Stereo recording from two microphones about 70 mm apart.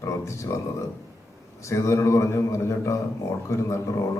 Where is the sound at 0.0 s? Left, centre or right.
Left.